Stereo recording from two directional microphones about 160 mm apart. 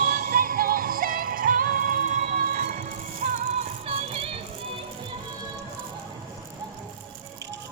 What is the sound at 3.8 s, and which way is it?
Music, 40° right (ahead or behind).